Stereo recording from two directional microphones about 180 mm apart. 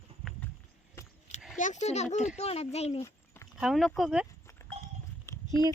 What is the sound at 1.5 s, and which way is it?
Speech, 45° left (ahead or behind).